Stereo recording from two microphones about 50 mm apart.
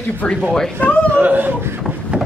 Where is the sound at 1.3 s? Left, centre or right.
Right.